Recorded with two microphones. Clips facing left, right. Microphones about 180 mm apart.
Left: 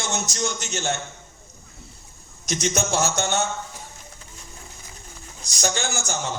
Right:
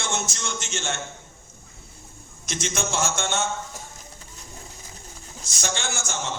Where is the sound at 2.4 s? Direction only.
40° left (ahead or behind).